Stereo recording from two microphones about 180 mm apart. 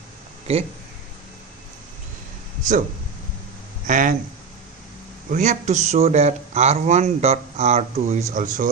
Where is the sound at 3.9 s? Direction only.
45° right (ahead or behind).